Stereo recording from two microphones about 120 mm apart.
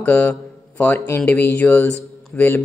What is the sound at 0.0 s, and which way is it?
Speech, 15° left (ahead or behind).